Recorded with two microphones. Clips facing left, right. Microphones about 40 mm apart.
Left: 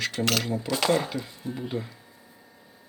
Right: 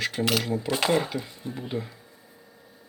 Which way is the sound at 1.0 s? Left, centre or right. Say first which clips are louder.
Right 1 dB; centre.